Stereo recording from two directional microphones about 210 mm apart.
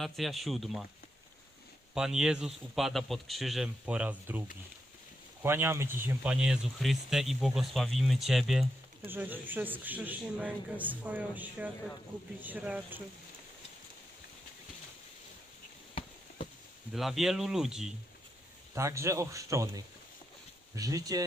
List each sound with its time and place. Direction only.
0.0 s speech: centre (ahead or behind)
2.0 s speech: 5° right (ahead or behind)
16.9 s speech: centre (ahead or behind)
18.7 s speech: 15° right (ahead or behind)